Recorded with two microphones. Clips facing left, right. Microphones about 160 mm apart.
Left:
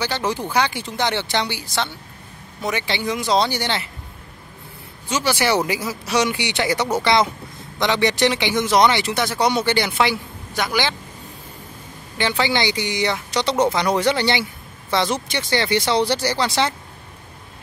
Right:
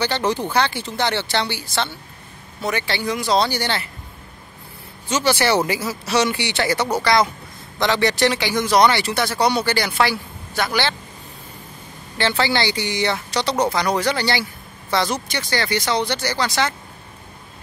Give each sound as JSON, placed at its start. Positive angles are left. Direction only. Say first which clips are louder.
{"t": 0.0, "sound": "speech", "louder": "right 2 dB", "side_deg": 10}
{"t": 5.1, "sound": "speech", "louder": "right 1 dB", "side_deg": 10}
{"t": 12.2, "sound": "speech", "louder": "even", "side_deg": 15}